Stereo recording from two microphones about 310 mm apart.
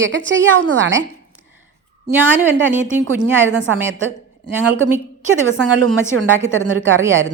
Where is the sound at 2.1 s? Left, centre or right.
Centre.